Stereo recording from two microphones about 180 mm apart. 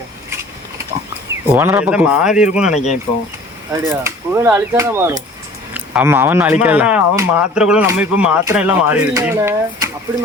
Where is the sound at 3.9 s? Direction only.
15° right (ahead or behind).